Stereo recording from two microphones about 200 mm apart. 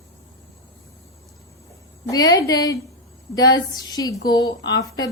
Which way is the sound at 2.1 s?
20° left (ahead or behind).